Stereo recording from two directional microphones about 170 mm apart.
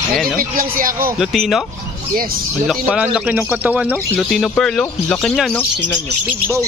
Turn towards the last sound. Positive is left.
turn(degrees=0)  # may be behind; listen again after turning